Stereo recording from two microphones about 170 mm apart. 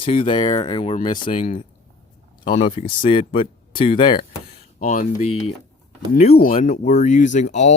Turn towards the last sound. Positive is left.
turn(degrees=45)  # may be behind; listen again after turning